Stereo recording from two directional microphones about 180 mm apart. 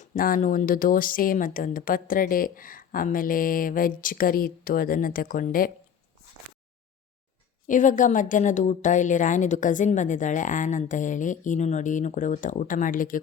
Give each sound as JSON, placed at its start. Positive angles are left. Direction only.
{"t": 0.0, "sound": "speech", "side_deg": 45}
{"t": 7.7, "sound": "speech", "side_deg": 45}